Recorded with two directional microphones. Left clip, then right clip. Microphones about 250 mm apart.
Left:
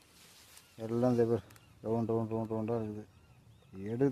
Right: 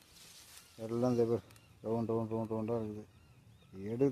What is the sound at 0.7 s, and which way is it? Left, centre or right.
Speech, left.